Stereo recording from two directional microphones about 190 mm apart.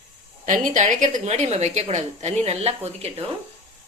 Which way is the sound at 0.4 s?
40° right (ahead or behind).